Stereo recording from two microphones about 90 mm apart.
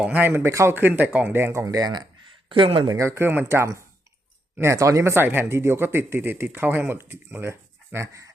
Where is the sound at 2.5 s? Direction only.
70° right (ahead or behind).